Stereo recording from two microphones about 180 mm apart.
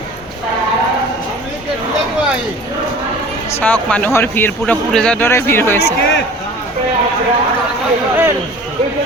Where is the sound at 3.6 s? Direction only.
10° left (ahead or behind).